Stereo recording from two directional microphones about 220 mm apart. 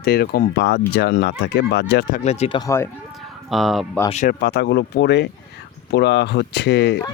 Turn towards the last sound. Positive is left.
turn(degrees=50)  # may be behind; listen again after turning